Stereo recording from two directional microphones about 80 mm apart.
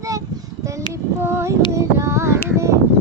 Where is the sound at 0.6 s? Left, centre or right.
Right.